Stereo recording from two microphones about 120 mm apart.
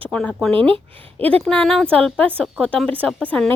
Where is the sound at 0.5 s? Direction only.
50° right (ahead or behind).